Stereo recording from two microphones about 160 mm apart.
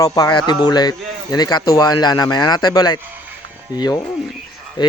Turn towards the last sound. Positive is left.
turn(degrees=30)  # may be behind; listen again after turning